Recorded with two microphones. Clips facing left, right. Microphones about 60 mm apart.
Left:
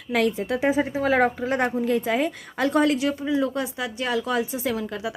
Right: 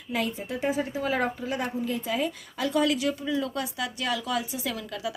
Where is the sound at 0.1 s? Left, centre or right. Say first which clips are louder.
Left 7 dB; left.